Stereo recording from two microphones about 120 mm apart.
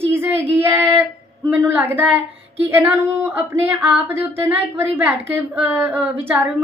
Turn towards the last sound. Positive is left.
turn(degrees=-15)  # may be behind; listen again after turning